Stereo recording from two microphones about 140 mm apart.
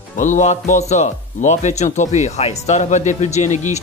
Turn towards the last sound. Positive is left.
turn(degrees=55)  # may be behind; listen again after turning